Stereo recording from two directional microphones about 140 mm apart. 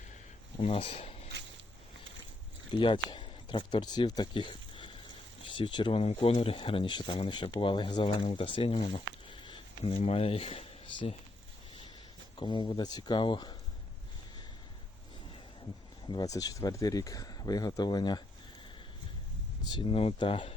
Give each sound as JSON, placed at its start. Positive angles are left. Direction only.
{"t": 0.6, "sound": "speech", "side_deg": 45}
{"t": 2.7, "sound": "speech", "side_deg": 35}
{"t": 12.4, "sound": "speech", "side_deg": 35}
{"t": 16.0, "sound": "speech", "side_deg": 30}
{"t": 19.6, "sound": "speech", "side_deg": 35}